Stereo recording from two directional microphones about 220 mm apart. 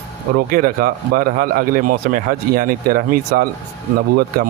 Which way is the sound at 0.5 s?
40° right (ahead or behind).